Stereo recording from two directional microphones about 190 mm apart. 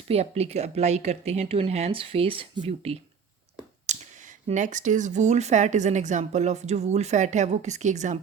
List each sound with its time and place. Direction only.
0.1 s speech: 35° right (ahead or behind)